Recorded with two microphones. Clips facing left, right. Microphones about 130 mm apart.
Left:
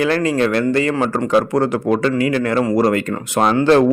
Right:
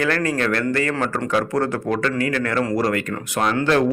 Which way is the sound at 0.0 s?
20° left (ahead or behind).